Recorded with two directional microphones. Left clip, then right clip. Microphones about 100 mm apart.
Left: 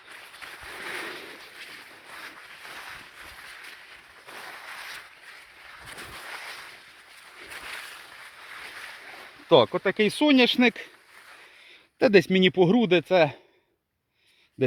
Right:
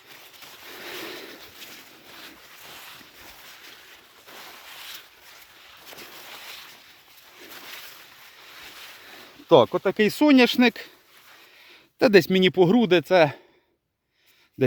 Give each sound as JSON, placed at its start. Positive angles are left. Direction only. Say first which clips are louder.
{"t": 9.6, "sound": "speech", "louder": "right 2 dB", "side_deg": -40}
{"t": 9.9, "sound": "speech", "louder": "right 3 dB", "side_deg": -85}
{"t": 10.6, "sound": "speech", "louder": "right 2 dB", "side_deg": -30}
{"t": 11.9, "sound": "speech", "louder": "right 2 dB", "side_deg": -40}